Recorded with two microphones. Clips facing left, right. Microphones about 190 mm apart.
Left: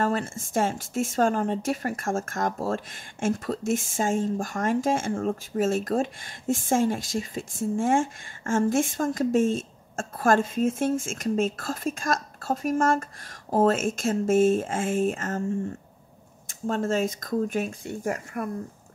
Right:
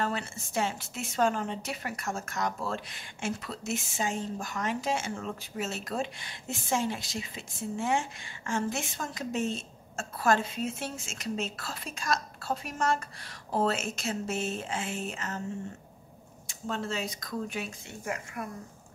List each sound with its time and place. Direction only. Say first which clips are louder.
0.0 s a woman's voice: left 6 dB; 50° left (ahead or behind)
16.4 s a woman's voice: left 8 dB; 50° left (ahead or behind)